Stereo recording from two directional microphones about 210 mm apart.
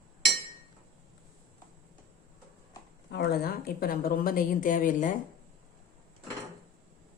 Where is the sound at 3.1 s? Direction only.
50° left (ahead or behind).